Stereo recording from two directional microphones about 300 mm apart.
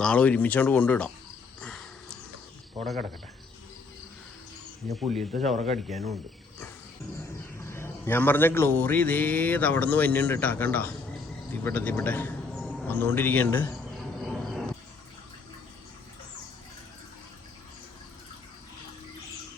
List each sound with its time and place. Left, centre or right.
0.0 s speech: centre
1.6 s a sound: centre
2.8 s speech: centre
4.9 s speech: centre
5.5 s speech: right
5.9 s speech: centre
7.6 s a man's voice: centre
14.3 s insect: centre